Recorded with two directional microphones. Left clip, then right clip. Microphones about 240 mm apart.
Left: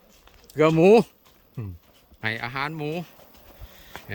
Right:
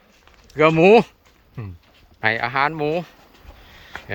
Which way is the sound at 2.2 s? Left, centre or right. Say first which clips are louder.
Right 9 dB; centre.